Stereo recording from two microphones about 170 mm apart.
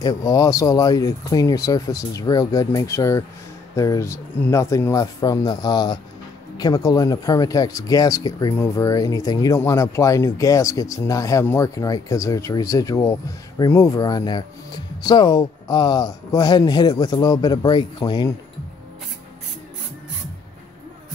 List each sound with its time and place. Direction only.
0.0 s speech: 20° left (ahead or behind)